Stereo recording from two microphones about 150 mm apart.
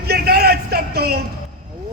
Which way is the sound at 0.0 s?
90° right.